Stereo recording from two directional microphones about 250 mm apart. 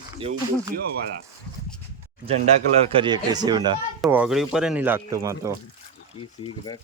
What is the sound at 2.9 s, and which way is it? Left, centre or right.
Speech, centre.